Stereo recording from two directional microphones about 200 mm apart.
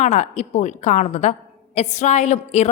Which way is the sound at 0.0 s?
35° left (ahead or behind).